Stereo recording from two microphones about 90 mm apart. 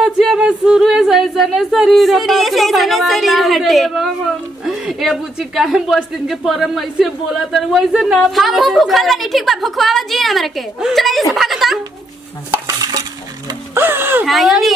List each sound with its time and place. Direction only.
0.0 s a woman's voice: 5° right (ahead or behind)
4.6 s a sound: 5° right (ahead or behind)
5.4 s a woman's voice: 5° right (ahead or behind)
11.3 s a sound: centre (ahead or behind)
12.6 s stir: 45° right (ahead or behind)
13.7 s speech: 25° right (ahead or behind)
14.2 s a woman's voice: centre (ahead or behind)